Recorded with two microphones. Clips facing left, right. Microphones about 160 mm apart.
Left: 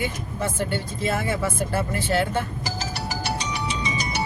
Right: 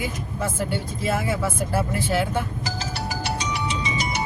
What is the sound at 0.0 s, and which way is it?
Speech, 5° right (ahead or behind).